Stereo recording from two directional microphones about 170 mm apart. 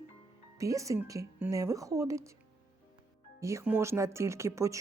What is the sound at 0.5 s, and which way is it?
Speech, 20° right (ahead or behind).